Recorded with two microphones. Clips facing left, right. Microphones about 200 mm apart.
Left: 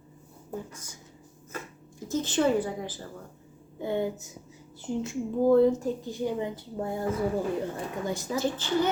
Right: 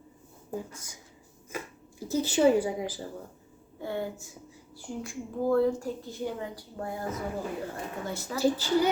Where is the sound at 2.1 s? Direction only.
10° right (ahead or behind).